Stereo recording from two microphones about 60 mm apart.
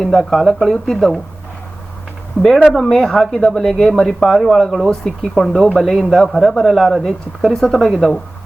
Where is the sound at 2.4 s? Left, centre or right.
Right.